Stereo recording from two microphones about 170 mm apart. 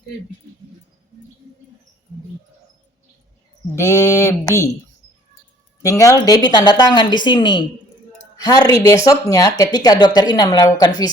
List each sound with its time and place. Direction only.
3.8 s speech: 15° left (ahead or behind)
5.8 s speech: 20° left (ahead or behind)